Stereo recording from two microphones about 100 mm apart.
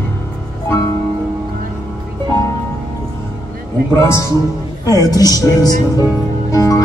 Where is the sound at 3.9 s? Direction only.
25° left (ahead or behind).